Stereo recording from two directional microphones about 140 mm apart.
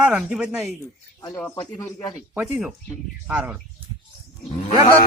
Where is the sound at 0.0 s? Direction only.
10° right (ahead or behind).